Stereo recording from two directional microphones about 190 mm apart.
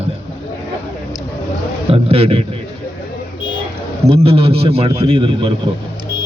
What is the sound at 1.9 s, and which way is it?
Speech, 30° right (ahead or behind).